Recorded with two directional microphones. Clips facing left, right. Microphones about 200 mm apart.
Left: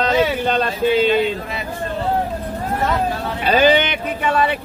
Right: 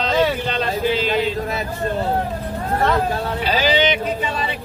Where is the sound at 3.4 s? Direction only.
55° left (ahead or behind).